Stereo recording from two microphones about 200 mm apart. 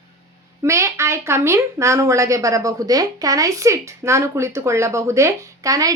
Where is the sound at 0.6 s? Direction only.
15° right (ahead or behind).